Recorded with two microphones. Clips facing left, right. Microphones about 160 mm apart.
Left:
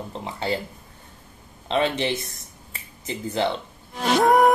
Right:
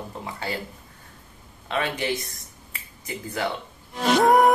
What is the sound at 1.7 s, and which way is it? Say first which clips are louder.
Speech: left 4 dB; 25° left (ahead or behind).